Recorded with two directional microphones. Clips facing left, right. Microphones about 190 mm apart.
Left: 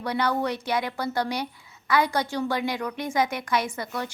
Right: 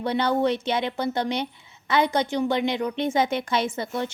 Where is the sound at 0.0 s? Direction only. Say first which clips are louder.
Right 3 dB; 25° right (ahead or behind).